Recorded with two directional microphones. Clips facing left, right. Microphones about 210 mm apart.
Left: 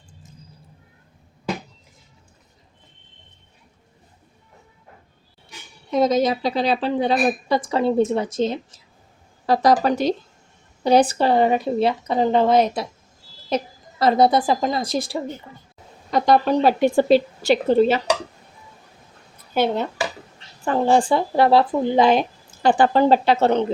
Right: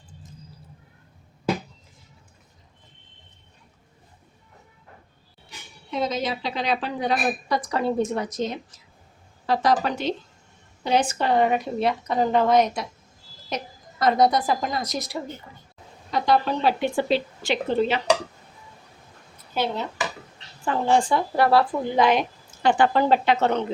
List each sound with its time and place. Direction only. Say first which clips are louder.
5.9 s a woman's voice: left 8 dB; 40° left (ahead or behind)
16.1 s speech: left 5 dB; 45° left (ahead or behind)
19.6 s speech: left 6 dB; 55° left (ahead or behind)
20.7 s speech: left 4 dB; 35° left (ahead or behind)